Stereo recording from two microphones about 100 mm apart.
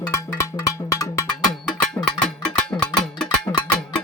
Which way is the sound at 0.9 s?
30° left (ahead or behind).